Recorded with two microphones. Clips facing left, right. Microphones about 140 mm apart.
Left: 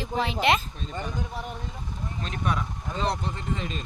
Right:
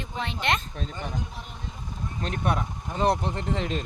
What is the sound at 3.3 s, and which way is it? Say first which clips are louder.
Speech: right 4 dB; 70° right (ahead or behind).